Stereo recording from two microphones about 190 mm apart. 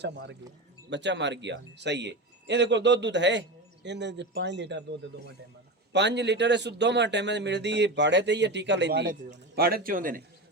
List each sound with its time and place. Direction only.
0.0 s speech: 65° right (ahead or behind); by 10.2 s 45° right (ahead or behind)